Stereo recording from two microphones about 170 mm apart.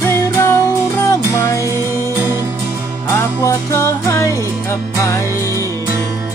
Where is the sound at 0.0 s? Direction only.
15° left (ahead or behind).